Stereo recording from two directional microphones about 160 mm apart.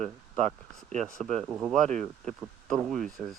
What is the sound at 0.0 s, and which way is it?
Speech, 5° left (ahead or behind).